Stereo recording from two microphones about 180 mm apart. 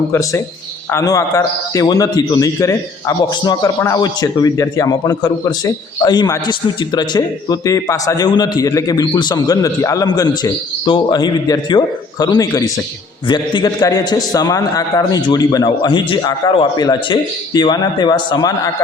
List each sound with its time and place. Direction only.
0.1 s a man's voice: 15° left (ahead or behind)